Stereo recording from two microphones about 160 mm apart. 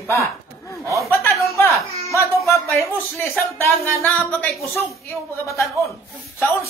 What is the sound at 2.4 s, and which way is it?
Speech, 15° left (ahead or behind).